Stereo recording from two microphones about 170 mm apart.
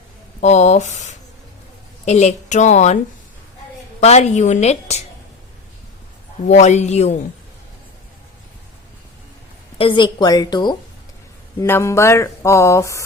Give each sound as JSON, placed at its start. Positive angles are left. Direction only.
{"t": 0.4, "sound": "a woman's voice", "side_deg": 40}
{"t": 2.0, "sound": "a woman's voice", "side_deg": 40}
{"t": 4.0, "sound": "a woman's voice", "side_deg": 40}
{"t": 6.5, "sound": "a woman's voice", "side_deg": 40}
{"t": 9.7, "sound": "a woman's voice", "side_deg": 30}